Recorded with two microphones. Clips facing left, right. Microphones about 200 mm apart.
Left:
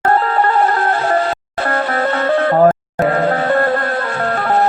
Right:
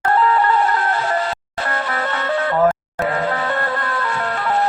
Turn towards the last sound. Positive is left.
turn(degrees=50)  # may be behind; listen again after turning